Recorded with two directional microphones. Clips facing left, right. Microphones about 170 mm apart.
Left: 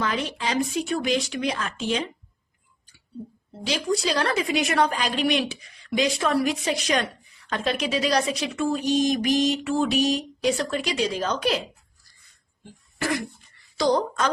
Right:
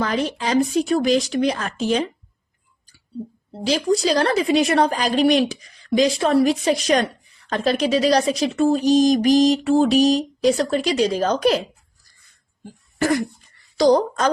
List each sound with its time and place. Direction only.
0.0 s speech: 40° right (ahead or behind)
3.7 s speech: 40° right (ahead or behind)
13.0 s cough: 40° right (ahead or behind)
13.7 s speech: 35° right (ahead or behind)